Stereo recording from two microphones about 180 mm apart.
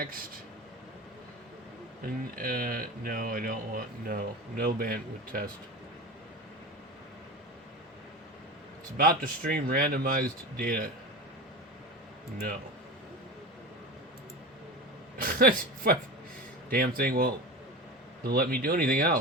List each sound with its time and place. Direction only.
0.0 s speech: 55° right (ahead or behind)
2.0 s speech: 55° right (ahead or behind)
9.0 s speech: 55° right (ahead or behind)
15.2 s a man's voice: 50° right (ahead or behind)